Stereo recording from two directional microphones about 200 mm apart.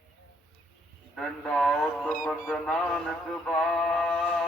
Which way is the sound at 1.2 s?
5° left (ahead or behind).